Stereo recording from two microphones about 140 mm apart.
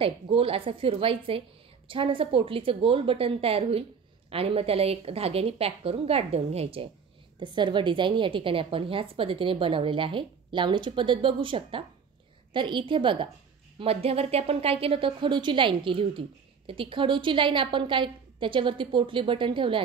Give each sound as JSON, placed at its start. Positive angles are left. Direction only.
{"t": 0.0, "sound": "a woman's voice", "side_deg": -40}
{"t": 7.3, "sound": "a woman's voice", "side_deg": -35}